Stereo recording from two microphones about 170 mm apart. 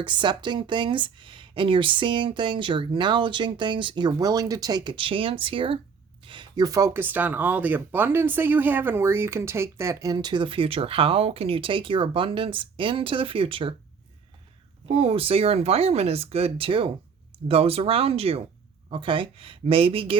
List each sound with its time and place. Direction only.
0.0 s speech: 25° right (ahead or behind)
14.8 s speech: 35° right (ahead or behind)